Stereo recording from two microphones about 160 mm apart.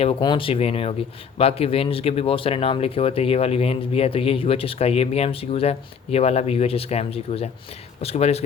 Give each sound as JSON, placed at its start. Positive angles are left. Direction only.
{"t": 0.0, "sound": "speech", "side_deg": 30}